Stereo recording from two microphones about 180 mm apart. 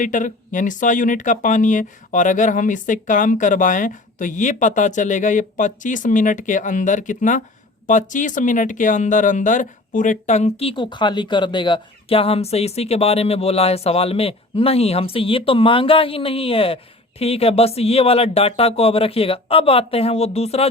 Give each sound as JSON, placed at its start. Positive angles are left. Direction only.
{"t": 0.0, "sound": "speech", "side_deg": 45}